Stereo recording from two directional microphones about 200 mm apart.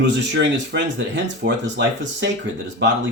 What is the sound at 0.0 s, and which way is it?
Speech, 60° right (ahead or behind).